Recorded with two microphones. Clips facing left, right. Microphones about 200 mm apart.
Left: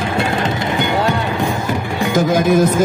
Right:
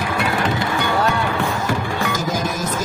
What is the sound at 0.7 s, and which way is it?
Music, 20° left (ahead or behind).